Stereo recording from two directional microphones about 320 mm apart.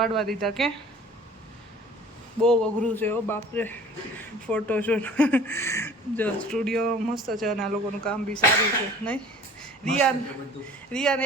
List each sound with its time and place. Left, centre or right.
0.0 s speech: centre
2.4 s speech: centre
9.0 s a sound: centre
10.9 s speech: centre